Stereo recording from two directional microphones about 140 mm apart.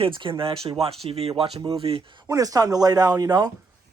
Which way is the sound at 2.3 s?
25° right (ahead or behind).